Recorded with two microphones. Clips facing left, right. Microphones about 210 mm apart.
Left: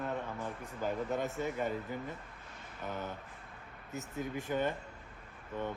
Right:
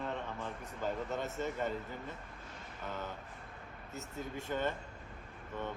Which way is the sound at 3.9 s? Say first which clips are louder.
Left 4 dB; 15° left (ahead or behind).